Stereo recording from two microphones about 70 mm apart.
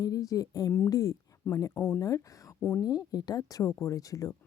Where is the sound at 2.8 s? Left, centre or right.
Left.